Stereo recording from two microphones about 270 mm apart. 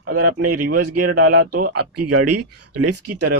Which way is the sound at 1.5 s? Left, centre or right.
Right.